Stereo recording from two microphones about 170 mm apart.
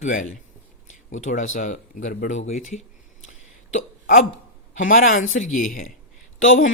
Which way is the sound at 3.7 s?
50° left (ahead or behind).